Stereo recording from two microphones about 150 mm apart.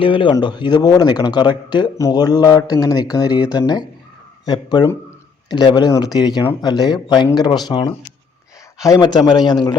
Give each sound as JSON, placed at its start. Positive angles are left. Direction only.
{"t": 0.0, "sound": "speech", "side_deg": 35}